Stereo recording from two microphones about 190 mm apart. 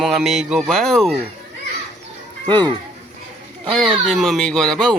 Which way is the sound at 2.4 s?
20° right (ahead or behind).